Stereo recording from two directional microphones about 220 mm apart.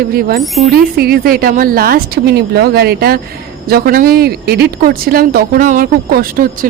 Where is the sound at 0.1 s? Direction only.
45° right (ahead or behind).